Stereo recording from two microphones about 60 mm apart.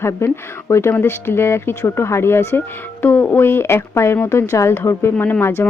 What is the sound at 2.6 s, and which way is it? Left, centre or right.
Speech, left.